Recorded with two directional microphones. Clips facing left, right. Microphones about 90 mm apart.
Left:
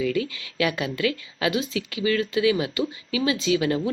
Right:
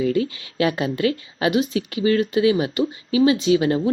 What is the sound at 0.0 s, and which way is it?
A woman's voice, 30° right (ahead or behind).